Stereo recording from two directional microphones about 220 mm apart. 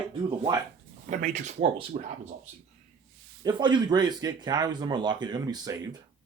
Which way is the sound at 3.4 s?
20° right (ahead or behind).